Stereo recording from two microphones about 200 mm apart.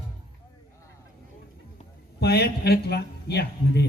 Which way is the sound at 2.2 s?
55° left (ahead or behind).